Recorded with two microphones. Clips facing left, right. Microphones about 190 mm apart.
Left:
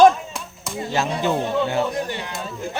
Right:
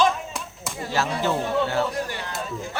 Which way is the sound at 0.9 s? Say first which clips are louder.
Left 2 dB; 20° left (ahead or behind).